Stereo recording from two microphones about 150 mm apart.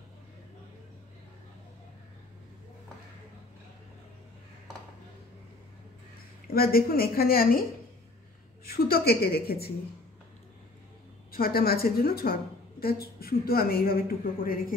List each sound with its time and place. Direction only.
6.4 s a woman's voice: 80° left
8.6 s a woman's voice: 90° left
11.3 s a woman's voice: 85° left